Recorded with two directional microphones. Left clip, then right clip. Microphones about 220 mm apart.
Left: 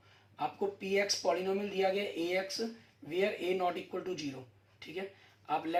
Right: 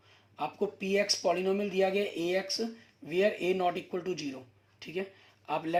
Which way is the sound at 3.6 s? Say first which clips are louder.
Right 3 dB; 45° right (ahead or behind).